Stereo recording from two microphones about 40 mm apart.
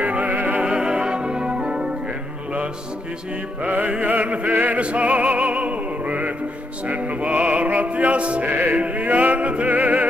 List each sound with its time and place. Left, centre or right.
0.0 s music: right
0.6 s music: right
3.6 s music: right
4.7 s opera: right
6.9 s music: right
8.5 s music: right
8.8 s music: right